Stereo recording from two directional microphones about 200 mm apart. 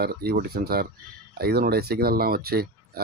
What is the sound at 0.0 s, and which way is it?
Speech, 50° right (ahead or behind).